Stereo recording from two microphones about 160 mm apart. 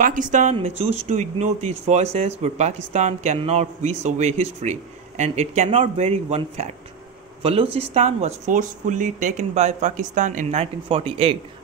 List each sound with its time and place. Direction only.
0.0 s a man's voice: 55° right (ahead or behind)
10.6 s speech: 35° right (ahead or behind)